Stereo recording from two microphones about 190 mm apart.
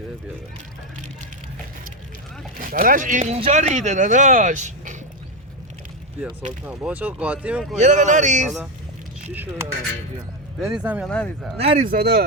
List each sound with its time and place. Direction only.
2.6 s speech: 50° right (ahead or behind)
6.7 s speech: 5° right (ahead or behind)
7.8 s speech: 40° right (ahead or behind)
8.4 s speech: centre (ahead or behind)
11.1 s speech: 5° left (ahead or behind)
11.8 s speech: 55° right (ahead or behind)